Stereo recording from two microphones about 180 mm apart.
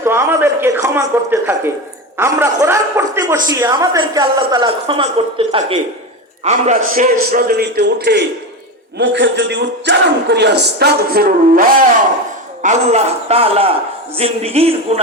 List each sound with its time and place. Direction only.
0.0 s a man's voice: 15° right (ahead or behind); by 6.7 s 40° right (ahead or behind)
6.9 s a man's voice: 50° right (ahead or behind); by 8.2 s 70° right (ahead or behind)
9.0 s a man's voice: 85° right; by 11.9 s 50° right (ahead or behind)
12.6 s a man's voice: 40° right (ahead or behind)